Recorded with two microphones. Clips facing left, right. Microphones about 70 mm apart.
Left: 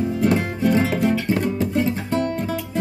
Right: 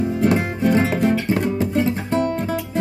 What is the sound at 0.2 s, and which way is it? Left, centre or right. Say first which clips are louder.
Guitar: right 1 dB; right.